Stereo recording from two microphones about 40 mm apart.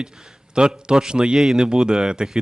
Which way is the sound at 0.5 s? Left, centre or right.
Right.